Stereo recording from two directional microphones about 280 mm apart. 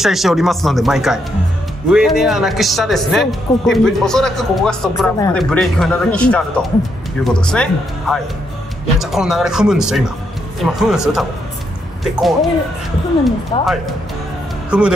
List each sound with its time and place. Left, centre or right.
0.0 s speech: centre
13.5 s speech: centre
14.7 s speech: centre